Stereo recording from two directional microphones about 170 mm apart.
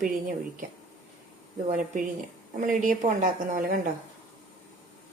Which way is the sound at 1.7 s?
50° right (ahead or behind).